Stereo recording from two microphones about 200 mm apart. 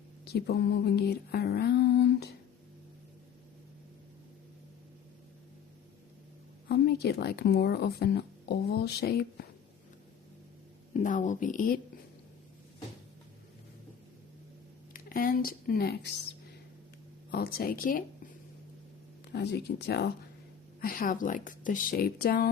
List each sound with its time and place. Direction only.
0.3 s a sound: 55° left (ahead or behind)
6.7 s speech: 55° left (ahead or behind)
10.9 s speech: 40° left (ahead or behind)
14.9 s speech: 45° left (ahead or behind)
17.3 s speech: 50° left (ahead or behind)
19.3 s a sound: 55° left (ahead or behind)
20.8 s speech: 45° left (ahead or behind)